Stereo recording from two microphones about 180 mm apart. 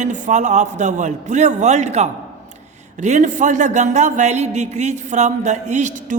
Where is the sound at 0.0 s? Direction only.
45° right (ahead or behind).